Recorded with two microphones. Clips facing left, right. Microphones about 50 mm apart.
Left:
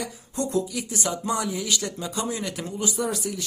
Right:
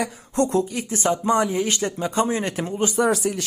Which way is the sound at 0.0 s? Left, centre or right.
Right.